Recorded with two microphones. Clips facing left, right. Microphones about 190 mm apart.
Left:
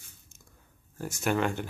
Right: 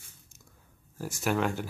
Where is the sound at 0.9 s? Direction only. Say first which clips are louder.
Left 1 dB; centre (ahead or behind).